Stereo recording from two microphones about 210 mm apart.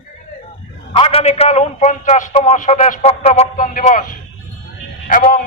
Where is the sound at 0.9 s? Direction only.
30° left (ahead or behind).